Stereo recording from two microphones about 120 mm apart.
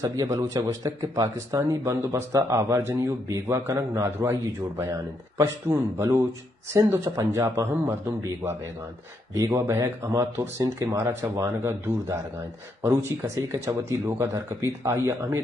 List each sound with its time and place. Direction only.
0.0 s speech: 25° right (ahead or behind)
9.3 s speech: 25° right (ahead or behind)